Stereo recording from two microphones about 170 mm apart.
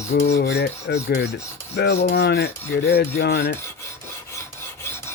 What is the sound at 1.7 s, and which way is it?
Rub, 80° left.